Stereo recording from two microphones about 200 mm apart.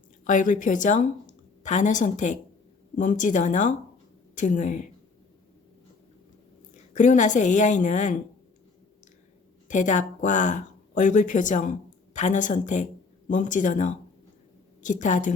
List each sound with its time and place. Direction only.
0.3 s a woman's voice: 40° left (ahead or behind)
6.9 s a woman's voice: 40° left (ahead or behind)
9.6 s a woman's voice: 40° left (ahead or behind)